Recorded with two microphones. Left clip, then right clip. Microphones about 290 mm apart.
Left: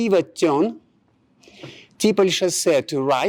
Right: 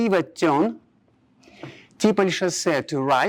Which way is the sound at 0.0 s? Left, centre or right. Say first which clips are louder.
Left 2 dB; right.